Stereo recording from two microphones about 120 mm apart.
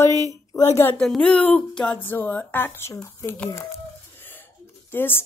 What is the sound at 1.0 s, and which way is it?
Speech, 5° left (ahead or behind).